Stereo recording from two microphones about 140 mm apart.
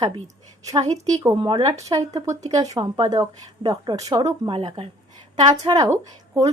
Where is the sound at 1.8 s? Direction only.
25° right (ahead or behind).